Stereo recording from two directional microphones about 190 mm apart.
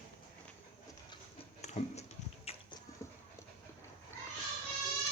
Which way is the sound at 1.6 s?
35° left (ahead or behind).